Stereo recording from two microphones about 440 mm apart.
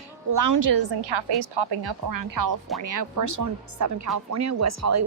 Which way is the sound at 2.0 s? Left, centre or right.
Right.